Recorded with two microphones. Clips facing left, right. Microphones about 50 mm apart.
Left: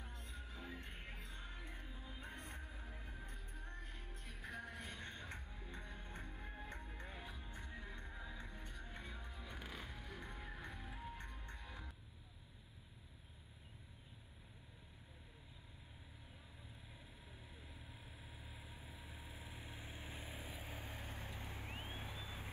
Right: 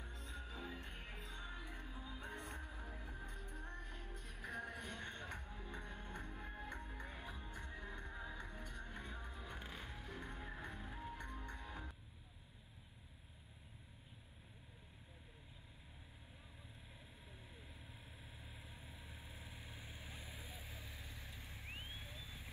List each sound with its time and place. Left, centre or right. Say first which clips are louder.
0.2 s music: right 6 dB; right
0.9 s music: right 2 dB; right
7.5 s music: right 2 dB; right
18.4 s vehicle: left 1 dB; centre
20.5 s vehicle: left 4 dB; left